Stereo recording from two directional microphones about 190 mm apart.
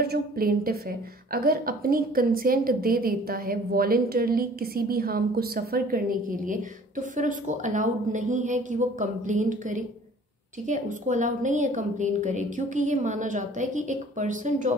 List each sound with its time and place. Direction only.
0.0 s a woman's voice: 55° right (ahead or behind)